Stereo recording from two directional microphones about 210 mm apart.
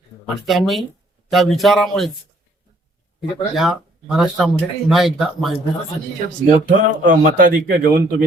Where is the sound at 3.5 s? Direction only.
Centre (ahead or behind).